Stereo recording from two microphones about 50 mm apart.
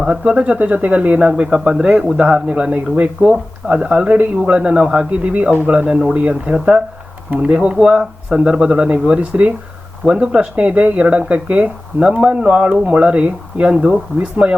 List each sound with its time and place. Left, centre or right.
0.0 s speech: centre
2.7 s speech: right
3.2 s speech: right
12.2 s speech: centre